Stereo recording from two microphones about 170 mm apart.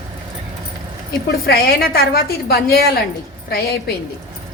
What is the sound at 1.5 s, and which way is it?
A woman's voice, 60° left (ahead or behind).